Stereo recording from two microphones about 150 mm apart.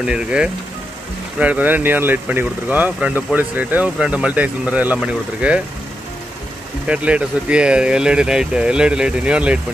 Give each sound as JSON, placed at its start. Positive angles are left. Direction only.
{"t": 0.0, "sound": "speech", "side_deg": -5}
{"t": 6.9, "sound": "speech", "side_deg": -10}